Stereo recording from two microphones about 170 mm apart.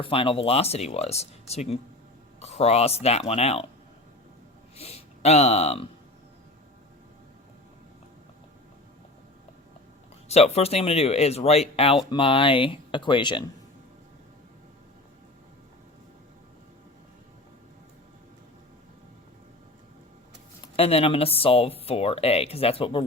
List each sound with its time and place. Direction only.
0.0 s speech: 30° left (ahead or behind)
4.8 s speech: 35° left (ahead or behind)
10.2 s speech: 40° left (ahead or behind)
20.7 s speech: 35° left (ahead or behind)